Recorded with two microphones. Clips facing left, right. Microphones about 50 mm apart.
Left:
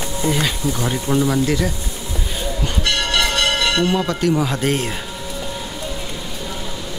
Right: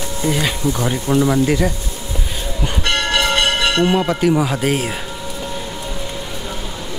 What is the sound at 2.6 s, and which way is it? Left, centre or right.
Music, right.